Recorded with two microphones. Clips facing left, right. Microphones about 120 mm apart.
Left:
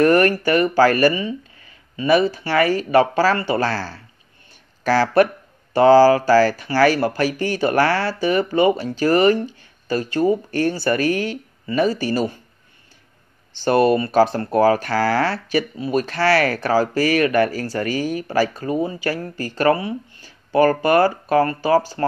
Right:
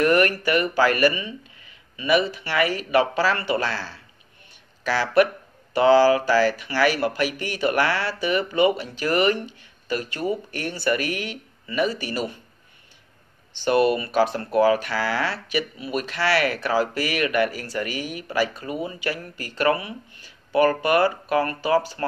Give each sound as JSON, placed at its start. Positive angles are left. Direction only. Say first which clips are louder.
{"t": 0.0, "sound": "speech", "louder": "left 4 dB", "side_deg": 35}
{"t": 13.5, "sound": "speech", "louder": "left 4 dB", "side_deg": 35}